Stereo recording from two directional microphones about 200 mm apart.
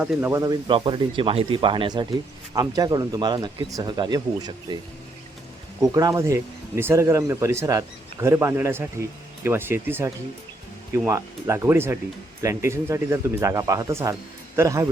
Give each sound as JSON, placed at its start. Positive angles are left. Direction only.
{"t": 0.0, "sound": "speech", "side_deg": -10}
{"t": 5.8, "sound": "speech", "side_deg": -15}